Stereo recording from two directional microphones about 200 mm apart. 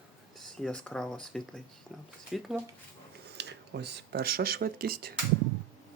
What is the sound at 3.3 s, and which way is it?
Speech, 60° right (ahead or behind).